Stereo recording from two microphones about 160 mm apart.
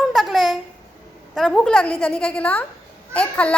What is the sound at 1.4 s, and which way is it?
A child's voice, 5° left (ahead or behind).